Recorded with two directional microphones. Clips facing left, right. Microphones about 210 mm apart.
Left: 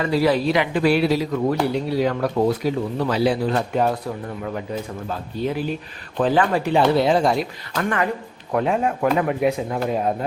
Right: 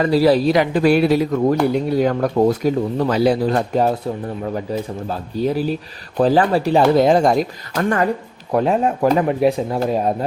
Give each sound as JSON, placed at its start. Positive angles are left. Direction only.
{"t": 0.0, "sound": "speech", "side_deg": -35}
{"t": 5.4, "sound": "speech", "side_deg": -40}